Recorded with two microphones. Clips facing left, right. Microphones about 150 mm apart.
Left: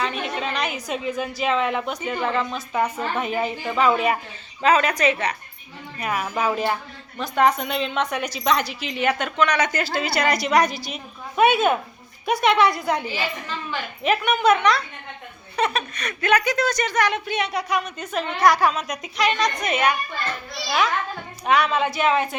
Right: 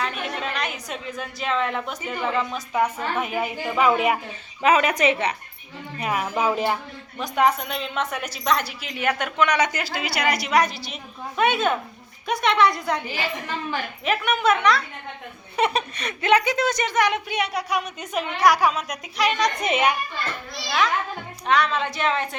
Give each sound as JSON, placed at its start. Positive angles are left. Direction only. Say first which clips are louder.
{"t": 0.0, "sound": "a woman's voice", "louder": "left 2 dB", "side_deg": 0}
{"t": 9.4, "sound": "a woman's voice", "louder": "even", "side_deg": -15}
{"t": 14.0, "sound": "a woman's voice", "louder": "left 3 dB", "side_deg": 0}
{"t": 15.5, "sound": "speech", "louder": "right 1 dB", "side_deg": -25}
{"t": 19.6, "sound": "a woman's voice", "louder": "right 1 dB", "side_deg": -25}
{"t": 21.4, "sound": "a woman's voice", "louder": "left 2 dB", "side_deg": 10}